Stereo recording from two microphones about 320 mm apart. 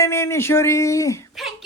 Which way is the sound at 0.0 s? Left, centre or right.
Centre.